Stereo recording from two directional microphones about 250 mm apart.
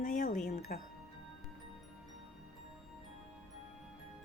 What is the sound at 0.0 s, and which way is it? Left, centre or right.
Music, left.